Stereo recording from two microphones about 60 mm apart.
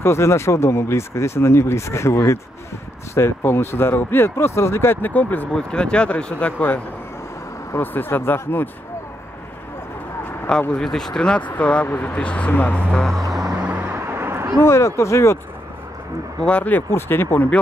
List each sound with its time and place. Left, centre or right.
0.0 s speech: left
5.1 s speech: left
5.5 s speech: centre
7.8 s speech: left
10.8 s speech: centre
11.5 s speech: left
12.9 s speech: centre
13.6 s music: right
13.9 s a sound: right
14.6 s speech: left
16.3 s speech: centre
16.9 s speech: left